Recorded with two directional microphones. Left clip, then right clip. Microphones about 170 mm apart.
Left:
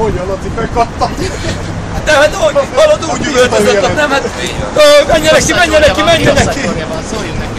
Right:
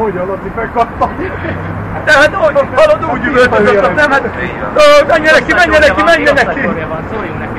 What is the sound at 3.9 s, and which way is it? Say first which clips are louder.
A man's voice: right 2 dB; 30° left (ahead or behind).